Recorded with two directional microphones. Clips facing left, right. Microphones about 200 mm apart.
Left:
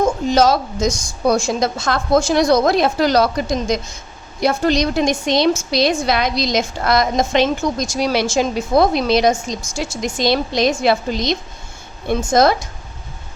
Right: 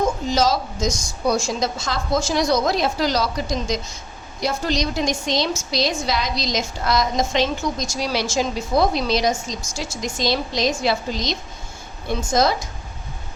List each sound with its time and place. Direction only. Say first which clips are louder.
0.3 s a woman's voice: left 5 dB; 60° left (ahead or behind)